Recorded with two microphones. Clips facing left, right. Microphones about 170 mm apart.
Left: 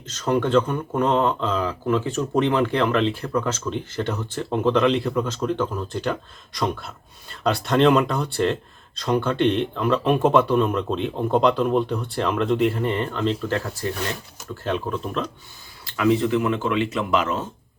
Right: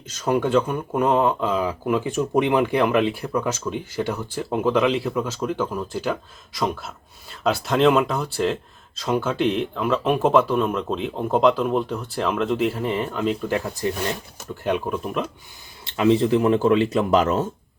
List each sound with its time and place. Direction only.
0.1 s speech: 10° right (ahead or behind)
15.8 s speech: 25° right (ahead or behind)